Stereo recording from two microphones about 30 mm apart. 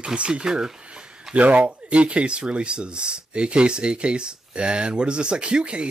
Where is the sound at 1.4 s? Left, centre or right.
Right.